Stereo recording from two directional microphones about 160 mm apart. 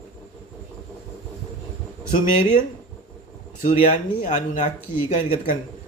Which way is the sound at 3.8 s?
50° left (ahead or behind).